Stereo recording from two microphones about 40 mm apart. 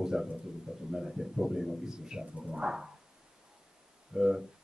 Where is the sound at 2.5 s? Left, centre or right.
Centre.